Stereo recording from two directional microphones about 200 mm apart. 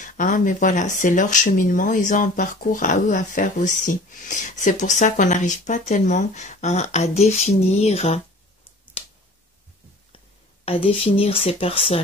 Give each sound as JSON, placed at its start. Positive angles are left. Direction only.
{"t": 0.0, "sound": "speech", "side_deg": 40}
{"t": 9.0, "sound": "a sound", "side_deg": 30}
{"t": 10.1, "sound": "speech", "side_deg": 30}